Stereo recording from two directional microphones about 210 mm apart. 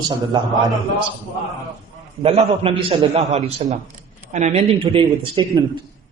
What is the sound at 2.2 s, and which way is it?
A man's voice, 30° right (ahead or behind).